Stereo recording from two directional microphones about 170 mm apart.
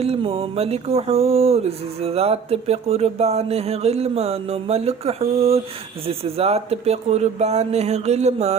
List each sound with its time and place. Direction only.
0.0 s music: 35° right (ahead or behind)